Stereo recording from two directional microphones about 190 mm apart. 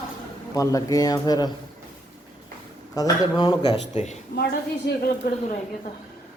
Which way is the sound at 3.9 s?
35° left (ahead or behind).